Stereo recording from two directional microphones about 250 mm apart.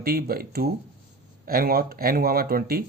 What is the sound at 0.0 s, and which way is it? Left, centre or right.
Speech, right.